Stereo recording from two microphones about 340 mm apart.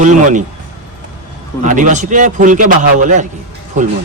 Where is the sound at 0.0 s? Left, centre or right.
Right.